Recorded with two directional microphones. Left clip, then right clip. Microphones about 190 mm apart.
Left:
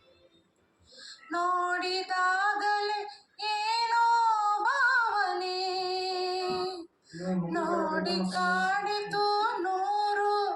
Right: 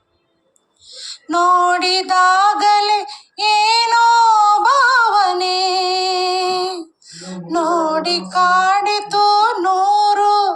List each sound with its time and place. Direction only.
0.9 s female singing: 50° right (ahead or behind)